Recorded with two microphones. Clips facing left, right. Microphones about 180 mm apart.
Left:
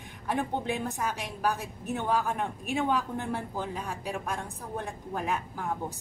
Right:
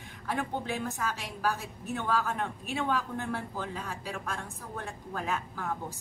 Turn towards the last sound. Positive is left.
turn(degrees=15)  # may be behind; listen again after turning